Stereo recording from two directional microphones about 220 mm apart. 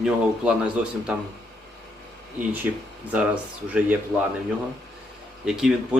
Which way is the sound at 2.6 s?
10° right (ahead or behind).